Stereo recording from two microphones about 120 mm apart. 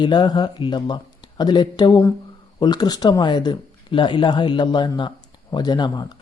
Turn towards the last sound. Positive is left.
turn(degrees=35)  # may be behind; listen again after turning